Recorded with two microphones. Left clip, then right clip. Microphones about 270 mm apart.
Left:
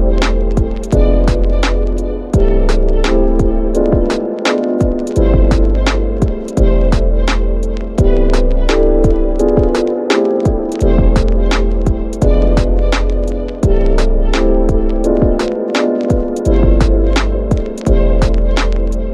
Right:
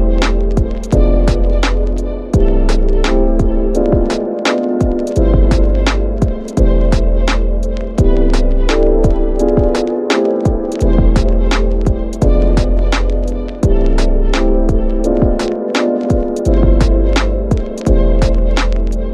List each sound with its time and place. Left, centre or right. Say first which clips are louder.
0.2 s music: even; centre
3.0 s music: left 1 dB; centre